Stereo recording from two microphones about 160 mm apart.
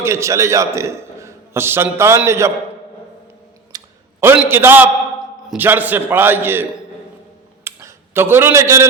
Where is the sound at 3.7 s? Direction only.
15° right (ahead or behind).